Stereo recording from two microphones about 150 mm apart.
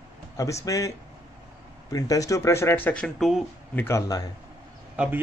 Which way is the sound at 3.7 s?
15° left (ahead or behind).